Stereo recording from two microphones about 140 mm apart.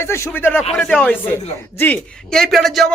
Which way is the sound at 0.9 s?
15° left (ahead or behind).